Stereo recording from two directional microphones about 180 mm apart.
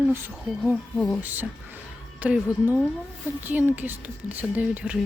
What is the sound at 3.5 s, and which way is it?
Speech, 10° right (ahead or behind).